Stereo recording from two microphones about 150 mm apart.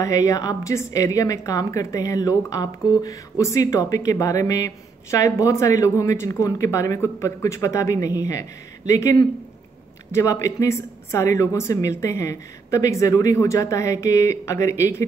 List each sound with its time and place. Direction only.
0.0 s a woman's voice: 20° left (ahead or behind)